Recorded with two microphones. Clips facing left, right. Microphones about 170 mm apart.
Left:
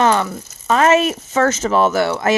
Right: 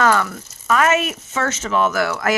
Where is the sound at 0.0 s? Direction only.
20° left (ahead or behind).